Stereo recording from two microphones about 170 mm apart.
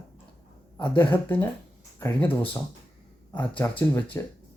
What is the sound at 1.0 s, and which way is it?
Speech, 10° left (ahead or behind).